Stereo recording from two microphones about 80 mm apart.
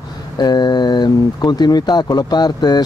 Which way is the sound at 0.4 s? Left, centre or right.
Left.